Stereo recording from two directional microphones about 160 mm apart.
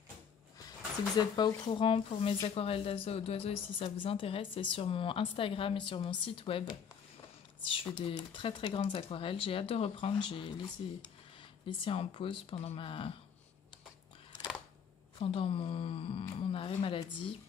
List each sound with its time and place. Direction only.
1.1 s a woman's voice: 25° left (ahead or behind)
8.0 s a woman's voice: 30° left (ahead or behind)
15.1 s a woman's voice: 35° left (ahead or behind)